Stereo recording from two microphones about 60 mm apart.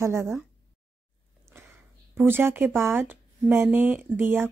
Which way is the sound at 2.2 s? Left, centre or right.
Right.